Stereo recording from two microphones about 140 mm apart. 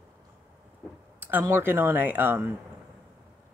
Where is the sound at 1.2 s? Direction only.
15° right (ahead or behind).